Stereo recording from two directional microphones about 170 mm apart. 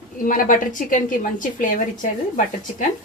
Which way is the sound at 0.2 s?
55° left (ahead or behind).